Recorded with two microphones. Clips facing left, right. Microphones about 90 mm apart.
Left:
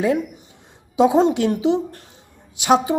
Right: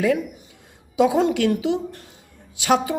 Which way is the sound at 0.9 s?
25° left (ahead or behind).